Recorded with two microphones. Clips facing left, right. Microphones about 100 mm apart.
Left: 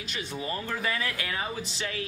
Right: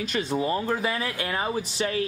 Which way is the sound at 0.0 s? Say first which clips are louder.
Right 9 dB; 45° right (ahead or behind).